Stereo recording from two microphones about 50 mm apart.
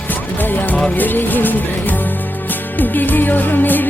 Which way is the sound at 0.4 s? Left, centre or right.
Left.